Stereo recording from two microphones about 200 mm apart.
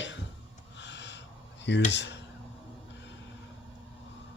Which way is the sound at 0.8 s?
60° left (ahead or behind).